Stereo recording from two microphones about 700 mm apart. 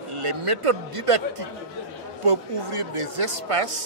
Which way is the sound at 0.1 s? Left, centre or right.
Right.